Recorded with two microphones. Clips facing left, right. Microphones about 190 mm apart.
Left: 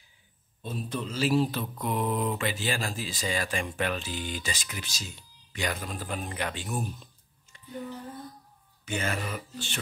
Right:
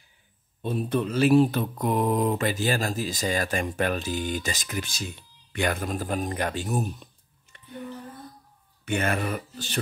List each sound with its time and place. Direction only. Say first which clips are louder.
0.6 s mantra: right 8 dB; 60° right (ahead or behind); by 6.9 s 40° right (ahead or behind)
7.5 s a sound: even; 60° right (ahead or behind)
8.8 s speech: right 6 dB; 60° right (ahead or behind)